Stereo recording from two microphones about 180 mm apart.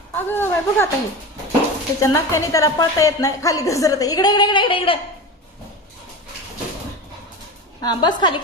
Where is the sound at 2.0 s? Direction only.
15° left (ahead or behind).